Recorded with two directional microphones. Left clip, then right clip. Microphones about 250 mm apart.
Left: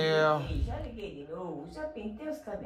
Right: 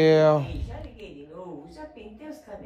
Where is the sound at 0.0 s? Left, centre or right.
Right.